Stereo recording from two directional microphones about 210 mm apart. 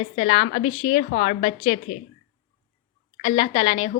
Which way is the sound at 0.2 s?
30° left (ahead or behind).